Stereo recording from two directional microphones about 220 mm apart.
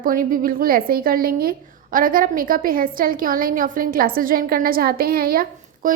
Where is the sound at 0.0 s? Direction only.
40° right (ahead or behind).